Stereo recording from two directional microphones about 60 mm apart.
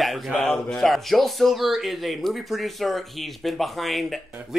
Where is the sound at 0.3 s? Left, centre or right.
Centre.